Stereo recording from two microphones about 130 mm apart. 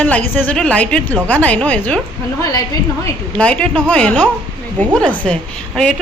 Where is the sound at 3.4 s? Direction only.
10° left (ahead or behind).